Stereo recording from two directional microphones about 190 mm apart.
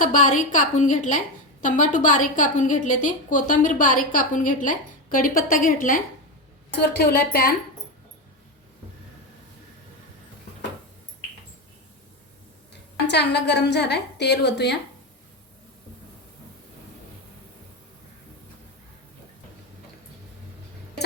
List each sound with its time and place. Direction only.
0.0 s a woman's voice: 40° left (ahead or behind)
6.7 s a woman's voice: 60° left (ahead or behind)
12.7 s a woman's voice: 60° left (ahead or behind)